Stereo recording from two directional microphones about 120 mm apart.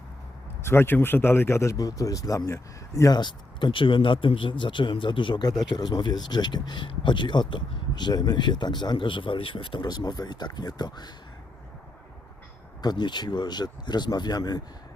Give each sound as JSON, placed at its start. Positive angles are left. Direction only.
{"t": 0.6, "sound": "speech", "side_deg": 20}
{"t": 12.8, "sound": "speech", "side_deg": 35}